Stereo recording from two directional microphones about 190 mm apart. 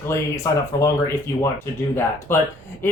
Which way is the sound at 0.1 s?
15° left (ahead or behind).